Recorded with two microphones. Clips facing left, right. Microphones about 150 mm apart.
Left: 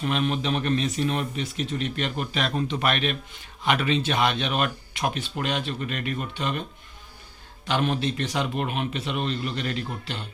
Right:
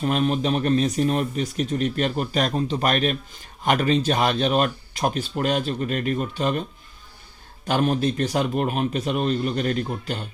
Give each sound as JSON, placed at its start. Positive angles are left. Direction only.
{"t": 0.0, "sound": "speech", "side_deg": -40}
{"t": 7.7, "sound": "a man's voice", "side_deg": -40}